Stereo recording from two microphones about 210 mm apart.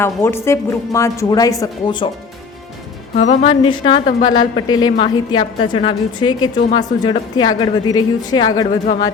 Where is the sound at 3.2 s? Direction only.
35° left (ahead or behind).